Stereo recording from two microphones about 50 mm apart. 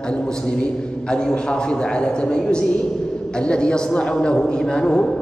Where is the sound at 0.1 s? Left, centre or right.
Centre.